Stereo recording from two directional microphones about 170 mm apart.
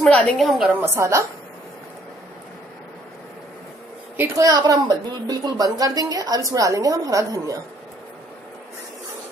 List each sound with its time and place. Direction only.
0.0 s a woman's voice: 5° left (ahead or behind)
0.7 s a woman's voice: 15° right (ahead or behind)
4.2 s a woman's voice: 20° right (ahead or behind)